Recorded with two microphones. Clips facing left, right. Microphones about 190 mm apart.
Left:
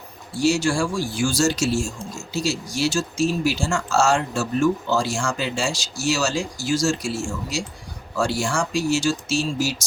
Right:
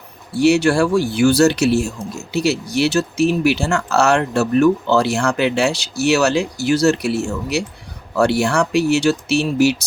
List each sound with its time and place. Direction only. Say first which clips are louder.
0.3 s speech: right 6 dB; 65° right (ahead or behind)